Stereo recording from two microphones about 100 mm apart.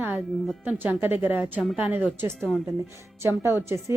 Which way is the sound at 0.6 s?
15° right (ahead or behind).